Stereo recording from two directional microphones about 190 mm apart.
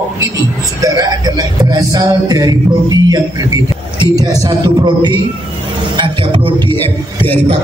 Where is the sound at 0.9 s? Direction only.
20° right (ahead or behind).